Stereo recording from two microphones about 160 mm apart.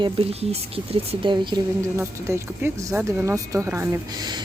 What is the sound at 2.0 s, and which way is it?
Speech, 15° right (ahead or behind).